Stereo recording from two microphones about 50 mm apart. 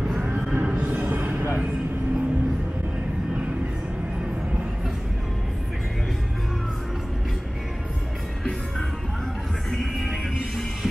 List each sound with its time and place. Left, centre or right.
0.2 s music: centre; by 1.6 s right
9.7 s music: centre